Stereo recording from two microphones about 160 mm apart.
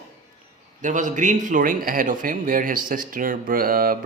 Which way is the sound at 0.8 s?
50° right (ahead or behind).